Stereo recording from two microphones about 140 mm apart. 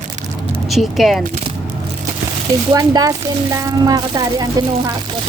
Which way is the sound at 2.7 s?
25° right (ahead or behind).